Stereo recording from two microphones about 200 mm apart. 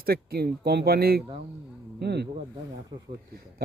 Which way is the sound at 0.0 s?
50° right (ahead or behind).